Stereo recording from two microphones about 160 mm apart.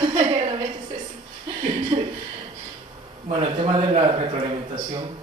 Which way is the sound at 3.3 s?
35° right (ahead or behind).